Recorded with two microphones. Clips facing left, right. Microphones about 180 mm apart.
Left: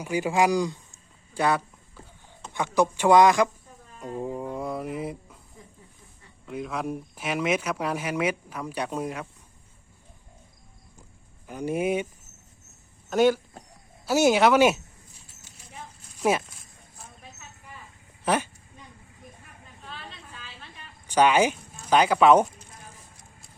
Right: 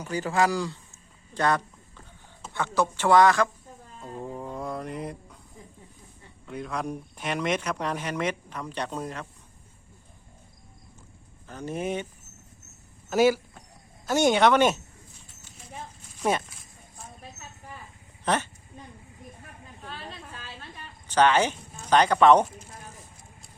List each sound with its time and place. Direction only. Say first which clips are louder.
0.0 s a sound: left 2 dB; 10° left (ahead or behind)
2.5 s speech: left 3 dB; 15° left (ahead or behind)
4.0 s music: left 4 dB; 10° left (ahead or behind)
6.4 s speech: left 1 dB; 5° left (ahead or behind)
11.4 s speech: left 5 dB; 10° left (ahead or behind)
13.1 s speech: even; 5° right (ahead or behind)
14.0 s speech: left 1 dB; 5° left (ahead or behind)
16.2 s speech: left 2 dB; 5° left (ahead or behind)
18.3 s speech: left 2 dB; 10° left (ahead or behind)
20.1 s a sound: right 3 dB; 40° right (ahead or behind)
21.1 s speech: left 1 dB; 10° left (ahead or behind)